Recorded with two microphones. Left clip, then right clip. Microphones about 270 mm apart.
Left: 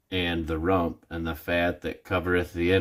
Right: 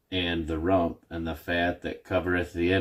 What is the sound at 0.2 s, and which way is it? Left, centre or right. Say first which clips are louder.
Speech: left 1 dB; centre.